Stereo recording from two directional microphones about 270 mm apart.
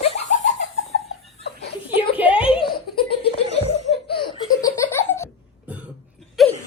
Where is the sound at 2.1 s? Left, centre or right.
Centre.